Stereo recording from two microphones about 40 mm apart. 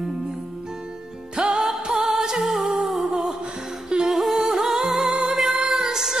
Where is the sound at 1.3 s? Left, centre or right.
Right.